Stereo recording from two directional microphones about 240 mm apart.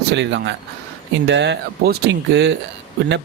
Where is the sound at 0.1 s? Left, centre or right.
Right.